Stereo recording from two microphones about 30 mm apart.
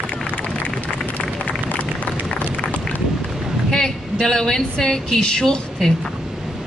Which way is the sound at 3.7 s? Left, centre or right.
Centre.